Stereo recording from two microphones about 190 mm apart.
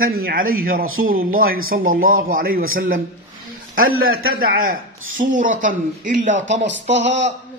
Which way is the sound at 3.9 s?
90° right.